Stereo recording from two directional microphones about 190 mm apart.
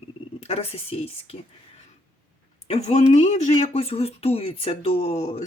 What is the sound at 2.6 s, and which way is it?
Speech, 35° left (ahead or behind).